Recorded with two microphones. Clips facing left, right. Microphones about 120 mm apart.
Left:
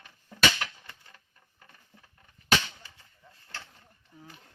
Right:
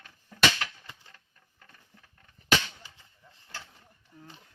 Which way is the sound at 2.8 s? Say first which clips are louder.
Even; 20° right (ahead or behind).